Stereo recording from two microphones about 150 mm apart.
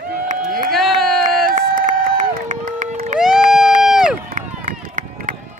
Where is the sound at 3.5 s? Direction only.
5° right (ahead or behind).